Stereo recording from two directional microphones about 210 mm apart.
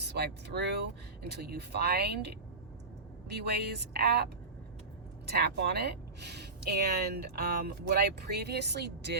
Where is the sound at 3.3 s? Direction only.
50° right (ahead or behind).